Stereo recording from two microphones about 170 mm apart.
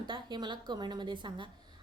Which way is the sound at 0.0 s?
25° right (ahead or behind).